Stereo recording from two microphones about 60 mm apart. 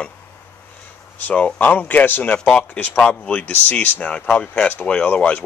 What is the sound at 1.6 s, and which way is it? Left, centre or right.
Speech, left.